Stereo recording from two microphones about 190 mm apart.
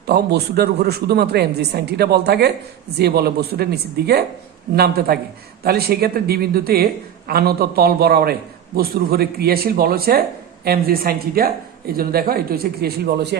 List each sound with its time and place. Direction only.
0.1 s a man's voice: 60° right (ahead or behind)